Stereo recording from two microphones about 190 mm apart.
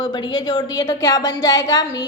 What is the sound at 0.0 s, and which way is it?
A woman's voice, 25° left (ahead or behind).